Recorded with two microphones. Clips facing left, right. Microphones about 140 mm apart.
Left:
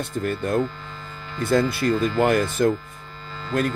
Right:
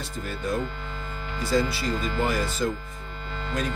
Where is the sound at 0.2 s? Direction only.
55° left (ahead or behind).